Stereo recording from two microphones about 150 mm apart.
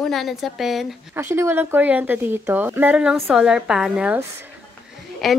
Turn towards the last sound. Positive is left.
turn(degrees=0)  # may be behind; listen again after turning